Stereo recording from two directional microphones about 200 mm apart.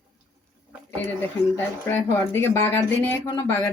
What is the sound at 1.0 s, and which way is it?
Speech, 10° left (ahead or behind).